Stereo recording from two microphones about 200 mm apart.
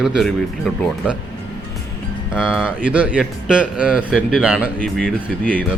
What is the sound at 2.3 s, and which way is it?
Speech, 5° right (ahead or behind).